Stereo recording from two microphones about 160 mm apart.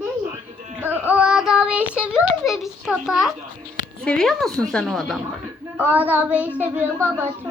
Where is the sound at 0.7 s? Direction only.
10° right (ahead or behind).